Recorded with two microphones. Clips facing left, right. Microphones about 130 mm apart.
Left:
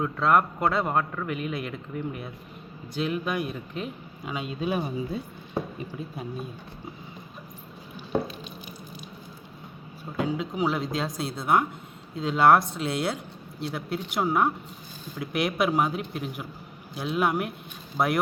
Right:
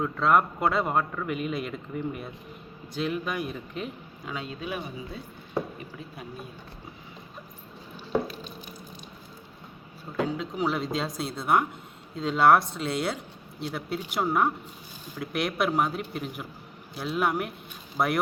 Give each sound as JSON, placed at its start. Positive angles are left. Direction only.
{"t": 0.0, "sound": "a man's voice", "side_deg": 0}
{"t": 4.3, "sound": "speech", "side_deg": 15}
{"t": 4.6, "sound": "speech", "side_deg": 30}
{"t": 10.2, "sound": "a man's voice", "side_deg": 5}